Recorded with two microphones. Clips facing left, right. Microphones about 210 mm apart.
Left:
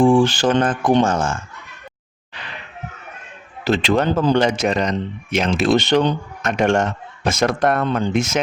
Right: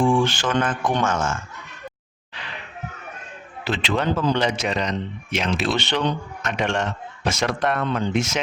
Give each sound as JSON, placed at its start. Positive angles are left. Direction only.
{"t": 0.0, "sound": "speech", "side_deg": 30}
{"t": 3.6, "sound": "speech", "side_deg": 40}